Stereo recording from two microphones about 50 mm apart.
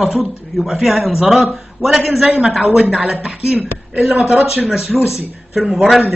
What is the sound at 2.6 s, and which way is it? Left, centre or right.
Speech, right.